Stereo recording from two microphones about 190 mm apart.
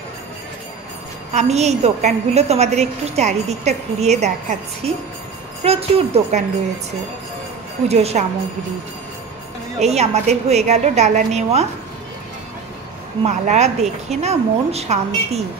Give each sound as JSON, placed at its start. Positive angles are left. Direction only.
{"t": 1.3, "sound": "a woman's voice", "side_deg": -35}
{"t": 7.9, "sound": "a woman's voice", "side_deg": -35}
{"t": 9.8, "sound": "a woman's voice", "side_deg": -35}
{"t": 13.2, "sound": "a woman's voice", "side_deg": -35}